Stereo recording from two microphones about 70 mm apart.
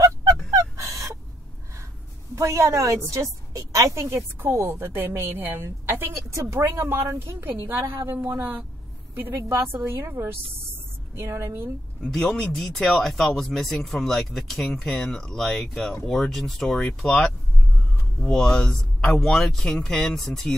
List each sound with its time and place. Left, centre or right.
0.0 s fowl: right
2.3 s a woman's voice: right
9.3 s a woman's voice: right
9.6 s a woman's voice: right
12.1 s speech: centre